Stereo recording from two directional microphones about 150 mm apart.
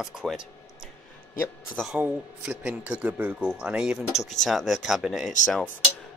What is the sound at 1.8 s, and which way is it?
Speech, 10° right (ahead or behind).